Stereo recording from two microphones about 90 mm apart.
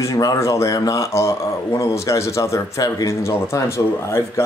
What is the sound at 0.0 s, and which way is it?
Speech, 35° left (ahead or behind).